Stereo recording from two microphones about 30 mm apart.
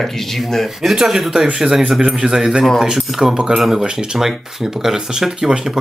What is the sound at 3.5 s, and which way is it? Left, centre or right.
Speech, centre.